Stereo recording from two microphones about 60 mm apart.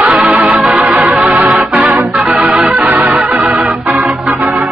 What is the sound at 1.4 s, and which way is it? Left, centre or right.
Organ, right.